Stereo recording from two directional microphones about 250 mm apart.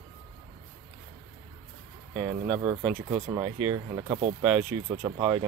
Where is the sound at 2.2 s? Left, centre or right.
Centre.